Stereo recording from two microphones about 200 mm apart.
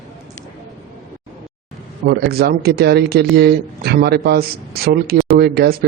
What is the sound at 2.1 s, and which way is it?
Speech, 50° right (ahead or behind).